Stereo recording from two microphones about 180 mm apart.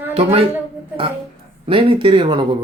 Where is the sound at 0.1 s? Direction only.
30° right (ahead or behind).